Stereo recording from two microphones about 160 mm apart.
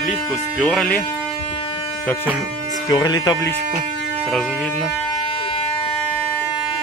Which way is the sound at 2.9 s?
25° left (ahead or behind).